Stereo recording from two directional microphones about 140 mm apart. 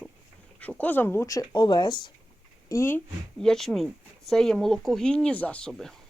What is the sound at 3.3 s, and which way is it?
Speech, 5° left (ahead or behind).